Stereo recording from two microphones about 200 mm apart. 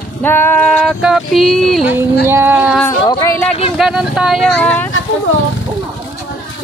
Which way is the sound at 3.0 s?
20° left (ahead or behind).